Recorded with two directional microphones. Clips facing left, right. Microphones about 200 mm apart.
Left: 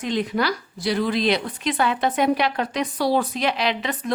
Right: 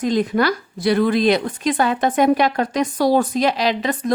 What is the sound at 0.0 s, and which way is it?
A woman's voice, 45° right (ahead or behind).